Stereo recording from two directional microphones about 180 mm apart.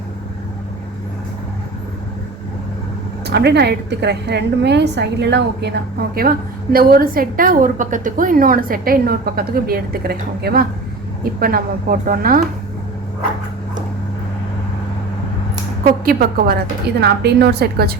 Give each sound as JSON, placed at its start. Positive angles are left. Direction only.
{"t": 3.2, "sound": "a woman's voice", "side_deg": -65}
{"t": 15.8, "sound": "a woman's voice", "side_deg": -55}
{"t": 17.0, "sound": "a woman's voice", "side_deg": -65}